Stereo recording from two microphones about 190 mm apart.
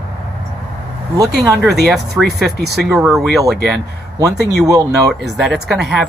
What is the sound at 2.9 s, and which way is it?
Speech, centre (ahead or behind).